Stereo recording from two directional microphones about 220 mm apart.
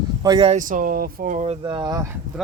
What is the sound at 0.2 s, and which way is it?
Speech, 20° right (ahead or behind).